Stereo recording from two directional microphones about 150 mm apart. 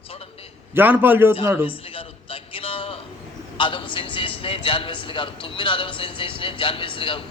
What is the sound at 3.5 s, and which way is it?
A man's voice, 35° left (ahead or behind).